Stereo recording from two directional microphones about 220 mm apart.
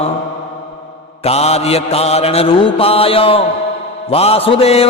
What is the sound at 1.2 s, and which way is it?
Mantra, 30° left (ahead or behind).